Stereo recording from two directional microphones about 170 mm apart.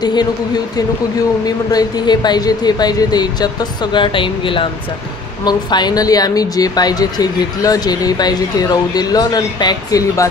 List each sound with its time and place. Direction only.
0.0 s speech: 25° left (ahead or behind)
1.7 s speech: 25° left (ahead or behind)